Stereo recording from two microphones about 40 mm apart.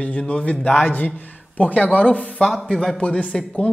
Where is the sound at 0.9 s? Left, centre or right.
Left.